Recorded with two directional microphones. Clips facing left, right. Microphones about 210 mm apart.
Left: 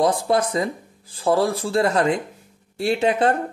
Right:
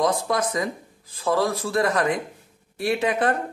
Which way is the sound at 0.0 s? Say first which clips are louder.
Left 3 dB; 30° left (ahead or behind).